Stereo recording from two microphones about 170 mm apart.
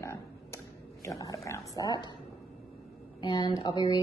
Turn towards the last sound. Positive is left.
turn(degrees=25)  # may be behind; listen again after turning